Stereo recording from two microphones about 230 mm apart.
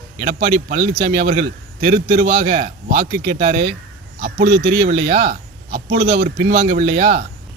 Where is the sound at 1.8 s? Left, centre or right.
Right.